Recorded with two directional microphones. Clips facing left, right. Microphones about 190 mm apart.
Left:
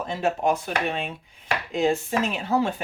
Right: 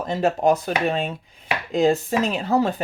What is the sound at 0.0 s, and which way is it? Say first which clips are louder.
Speech: right 4 dB; 40° right (ahead or behind).